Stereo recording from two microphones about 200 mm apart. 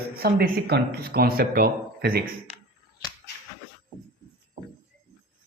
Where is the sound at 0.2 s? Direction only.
50° right (ahead or behind).